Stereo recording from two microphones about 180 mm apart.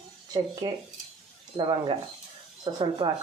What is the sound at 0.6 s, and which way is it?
Speech, 25° right (ahead or behind).